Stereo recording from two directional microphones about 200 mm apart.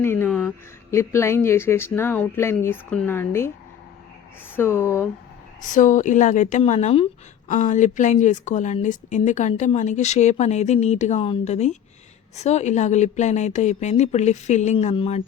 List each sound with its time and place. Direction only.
0.0 s speech: 10° left (ahead or behind)
4.5 s speech: 10° left (ahead or behind)
5.6 s a woman's voice: 40° left (ahead or behind)